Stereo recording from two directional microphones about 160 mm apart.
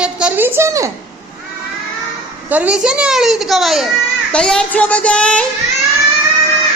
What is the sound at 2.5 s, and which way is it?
A woman's voice, 10° right (ahead or behind).